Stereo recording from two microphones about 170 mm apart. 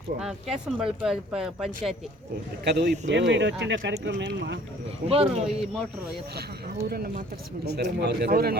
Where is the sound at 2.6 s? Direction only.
80° right.